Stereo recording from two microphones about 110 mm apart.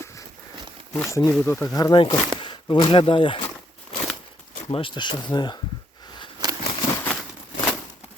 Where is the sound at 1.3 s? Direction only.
10° left (ahead or behind).